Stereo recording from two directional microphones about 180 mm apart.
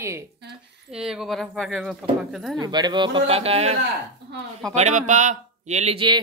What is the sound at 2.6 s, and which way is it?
A man's voice, 25° right (ahead or behind).